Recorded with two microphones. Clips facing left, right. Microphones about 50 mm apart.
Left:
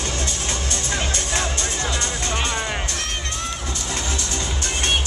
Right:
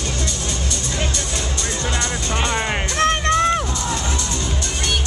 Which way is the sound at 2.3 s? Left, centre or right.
Right.